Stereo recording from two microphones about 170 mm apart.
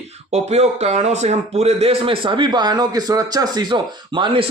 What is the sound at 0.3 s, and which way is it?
Speech, 40° right (ahead or behind).